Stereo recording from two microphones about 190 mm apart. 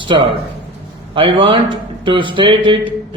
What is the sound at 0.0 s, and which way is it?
A man's voice, 25° right (ahead or behind).